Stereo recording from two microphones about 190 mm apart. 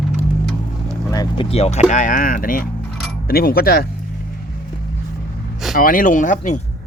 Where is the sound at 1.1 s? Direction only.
25° left (ahead or behind); by 3.9 s 55° left (ahead or behind).